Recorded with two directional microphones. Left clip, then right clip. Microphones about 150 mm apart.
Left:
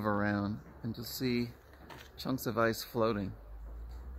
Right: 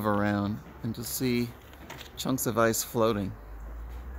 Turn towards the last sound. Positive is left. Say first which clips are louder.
# right 6 dB
turn(degrees=0)  # may be behind; listen again after turning